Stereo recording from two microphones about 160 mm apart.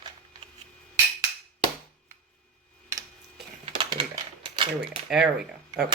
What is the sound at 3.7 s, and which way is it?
Typing, 30° right (ahead or behind).